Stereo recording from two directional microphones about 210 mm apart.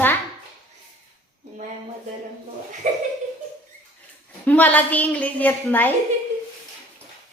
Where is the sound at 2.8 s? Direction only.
35° right (ahead or behind).